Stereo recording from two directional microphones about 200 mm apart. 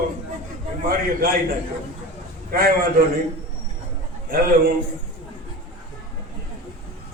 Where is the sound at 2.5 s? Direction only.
45° right (ahead or behind).